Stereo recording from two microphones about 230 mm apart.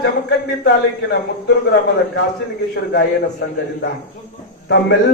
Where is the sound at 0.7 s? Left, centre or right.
Left.